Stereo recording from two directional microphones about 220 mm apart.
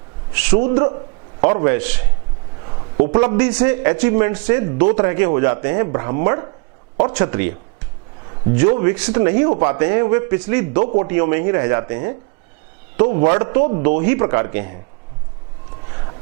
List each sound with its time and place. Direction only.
0.3 s a man's voice: 10° right (ahead or behind)
8.5 s a man's voice: 15° right (ahead or behind)